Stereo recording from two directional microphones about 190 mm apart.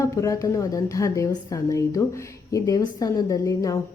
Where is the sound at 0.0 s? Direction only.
15° left (ahead or behind).